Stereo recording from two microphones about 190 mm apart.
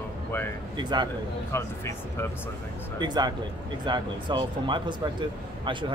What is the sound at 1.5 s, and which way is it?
Speech, 15° left (ahead or behind).